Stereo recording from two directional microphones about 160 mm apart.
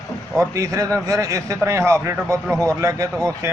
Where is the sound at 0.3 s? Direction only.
20° right (ahead or behind).